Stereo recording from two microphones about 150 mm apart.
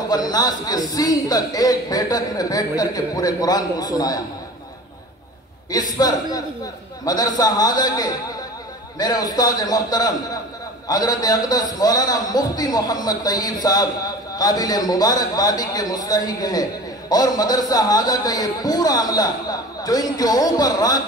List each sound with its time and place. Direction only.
0.1 s a man's voice: 25° left (ahead or behind)
5.7 s a man's voice: 25° left (ahead or behind)